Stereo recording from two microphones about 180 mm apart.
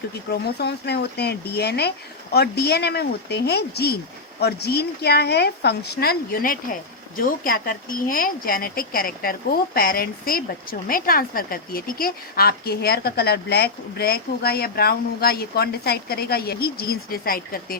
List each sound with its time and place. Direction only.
0.3 s speech: 65° left (ahead or behind)